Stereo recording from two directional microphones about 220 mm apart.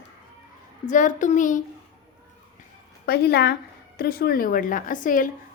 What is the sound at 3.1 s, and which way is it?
A woman's voice, 45° left (ahead or behind).